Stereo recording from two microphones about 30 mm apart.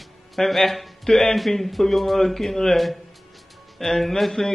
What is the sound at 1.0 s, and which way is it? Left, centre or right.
Speech, centre.